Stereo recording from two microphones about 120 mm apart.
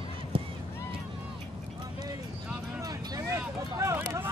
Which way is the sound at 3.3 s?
25° right (ahead or behind).